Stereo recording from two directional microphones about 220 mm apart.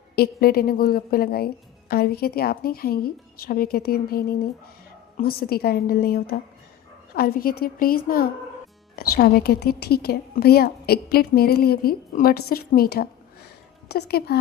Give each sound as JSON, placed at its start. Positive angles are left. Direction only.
{"t": 0.2, "sound": "a woman's voice", "side_deg": 45}